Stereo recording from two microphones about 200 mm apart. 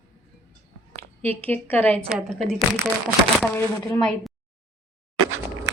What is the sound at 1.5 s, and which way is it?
Speech, 10° left (ahead or behind).